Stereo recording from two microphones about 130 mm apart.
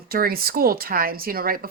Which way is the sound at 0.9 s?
90° right.